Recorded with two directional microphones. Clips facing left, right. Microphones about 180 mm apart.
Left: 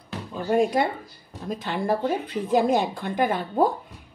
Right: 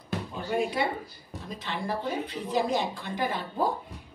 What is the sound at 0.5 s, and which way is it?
Speech, 45° left (ahead or behind).